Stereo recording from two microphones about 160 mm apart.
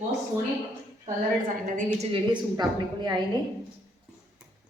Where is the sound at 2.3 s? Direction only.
25° right (ahead or behind).